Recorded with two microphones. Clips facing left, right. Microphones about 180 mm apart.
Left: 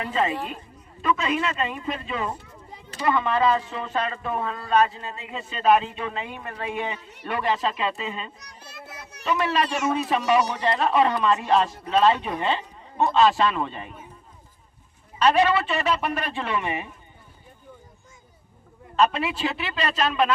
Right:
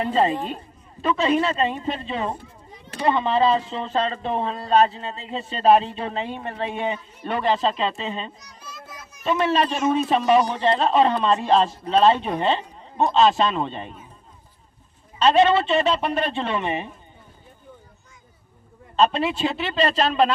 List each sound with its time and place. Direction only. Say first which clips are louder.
0.0 s a man's voice: right 4 dB; 35° right (ahead or behind)
8.4 s child singing: right 1 dB; 65° left (ahead or behind)
9.2 s speech: right 3 dB; 25° right (ahead or behind)
15.2 s speech: right 3 dB; 25° right (ahead or behind)
18.9 s speech: right 2 dB; 25° right (ahead or behind)